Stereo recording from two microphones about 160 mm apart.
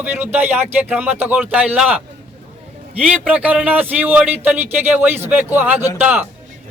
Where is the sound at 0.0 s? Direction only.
15° right (ahead or behind).